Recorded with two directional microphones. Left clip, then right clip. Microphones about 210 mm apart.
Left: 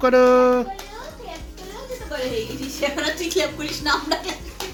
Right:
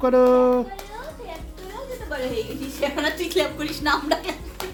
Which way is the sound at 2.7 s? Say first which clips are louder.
Even; 30° right (ahead or behind).